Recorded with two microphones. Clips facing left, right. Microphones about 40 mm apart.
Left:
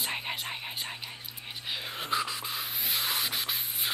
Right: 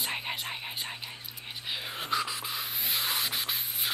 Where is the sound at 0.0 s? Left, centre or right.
Centre.